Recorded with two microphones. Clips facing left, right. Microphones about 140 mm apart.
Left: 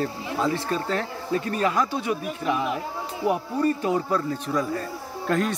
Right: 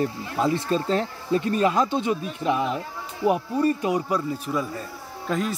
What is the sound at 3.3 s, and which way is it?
Speech, 20° right (ahead or behind).